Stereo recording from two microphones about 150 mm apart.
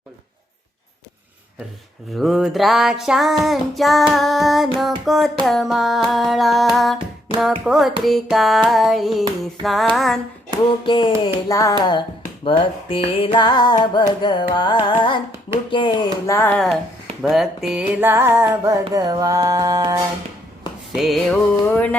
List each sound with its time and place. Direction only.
2.1 s music: centre (ahead or behind)
10.7 s music: 30° left (ahead or behind)
11.4 s music: 20° left (ahead or behind)
16.2 s music: 15° left (ahead or behind)
17.2 s music: centre (ahead or behind); by 20.0 s 25° right (ahead or behind)
20.9 s music: centre (ahead or behind)